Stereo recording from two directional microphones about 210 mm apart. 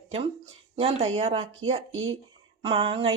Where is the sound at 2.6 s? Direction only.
25° right (ahead or behind).